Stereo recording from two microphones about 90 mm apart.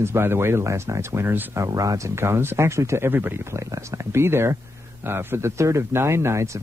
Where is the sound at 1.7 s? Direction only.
35° right (ahead or behind).